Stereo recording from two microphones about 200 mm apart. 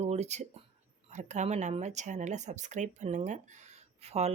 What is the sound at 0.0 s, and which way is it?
Speech, 35° right (ahead or behind).